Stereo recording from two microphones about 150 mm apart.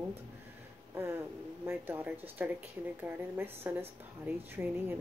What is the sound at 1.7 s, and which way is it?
Speech, 15° right (ahead or behind).